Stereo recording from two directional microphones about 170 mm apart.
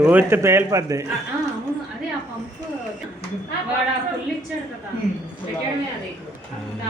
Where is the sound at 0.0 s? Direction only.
10° right (ahead or behind).